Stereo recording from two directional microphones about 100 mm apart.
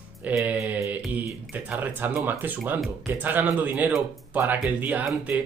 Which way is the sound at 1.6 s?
20° right (ahead or behind).